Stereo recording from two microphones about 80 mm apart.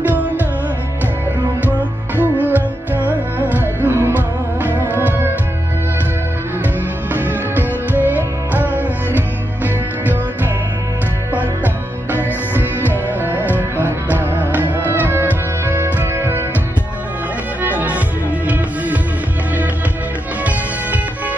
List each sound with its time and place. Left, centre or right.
2.1 s music: right
7.2 s music: right
11.3 s music: right
17.6 s music: centre